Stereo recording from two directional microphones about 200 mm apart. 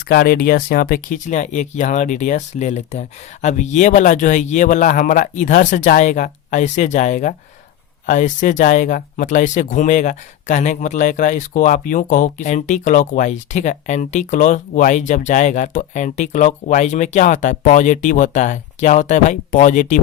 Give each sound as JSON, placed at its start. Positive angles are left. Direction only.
{"t": 0.1, "sound": "speech", "side_deg": 45}